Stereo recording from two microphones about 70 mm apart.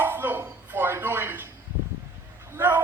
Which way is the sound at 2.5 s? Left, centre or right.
Right.